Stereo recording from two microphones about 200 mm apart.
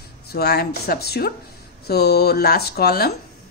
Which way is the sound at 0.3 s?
55° left (ahead or behind).